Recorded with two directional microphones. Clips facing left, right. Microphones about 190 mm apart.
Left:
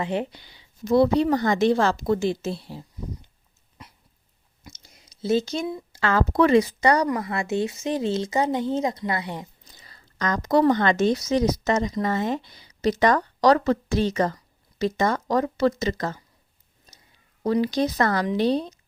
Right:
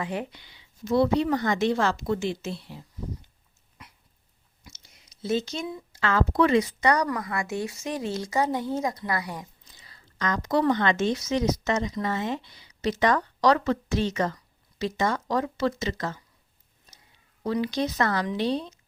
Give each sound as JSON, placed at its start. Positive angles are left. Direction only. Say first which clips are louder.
{"t": 0.0, "sound": "speech", "louder": "left 5 dB", "side_deg": 30}
{"t": 4.6, "sound": "speech", "louder": "left 5 dB", "side_deg": 40}
{"t": 9.6, "sound": "a woman's voice", "louder": "left 3 dB", "side_deg": 40}
{"t": 17.4, "sound": "speech", "louder": "left 4 dB", "side_deg": 40}